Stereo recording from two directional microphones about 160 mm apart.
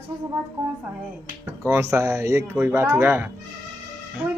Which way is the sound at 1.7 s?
15° right (ahead or behind).